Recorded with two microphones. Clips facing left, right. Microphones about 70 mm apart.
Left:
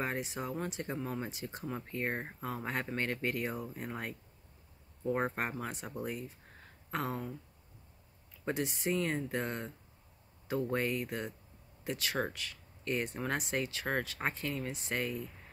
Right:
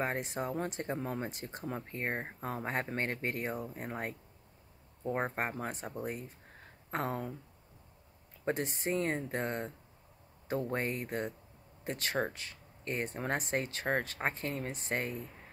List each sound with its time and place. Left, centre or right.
0.0 s speech: right
1.7 s speech: right
5.6 s speech: right
8.5 s speech: right
12.2 s speech: right